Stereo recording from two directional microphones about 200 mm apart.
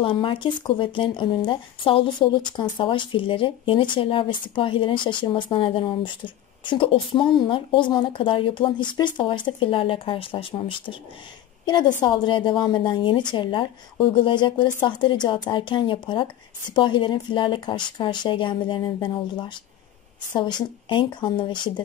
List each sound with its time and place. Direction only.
0.0 s speech: 25° left (ahead or behind)
12.0 s speech: 25° left (ahead or behind)